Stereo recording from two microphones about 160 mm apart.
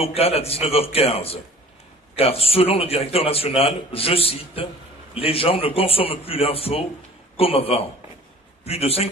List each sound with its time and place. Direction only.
0.0 s a man's voice: 40° left (ahead or behind)